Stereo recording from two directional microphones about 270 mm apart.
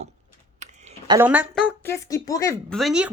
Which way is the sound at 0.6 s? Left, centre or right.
Right.